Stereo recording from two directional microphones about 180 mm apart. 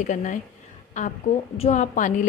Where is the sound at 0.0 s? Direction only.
45° left (ahead or behind).